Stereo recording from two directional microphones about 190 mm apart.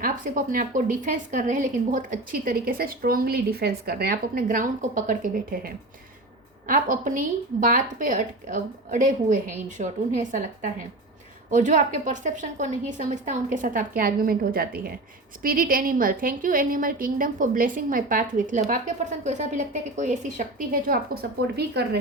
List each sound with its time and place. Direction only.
0.0 s a woman's voice: 45° right (ahead or behind)